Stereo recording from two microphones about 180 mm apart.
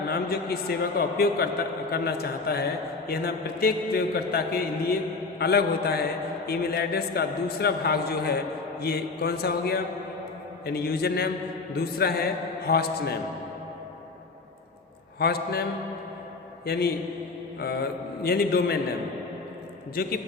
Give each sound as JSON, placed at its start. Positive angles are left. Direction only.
{"t": 0.1, "sound": "a man's voice", "side_deg": 60}
{"t": 15.2, "sound": "a man's voice", "side_deg": 60}
{"t": 16.6, "sound": "a man's voice", "side_deg": 60}
{"t": 18.2, "sound": "a man's voice", "side_deg": 60}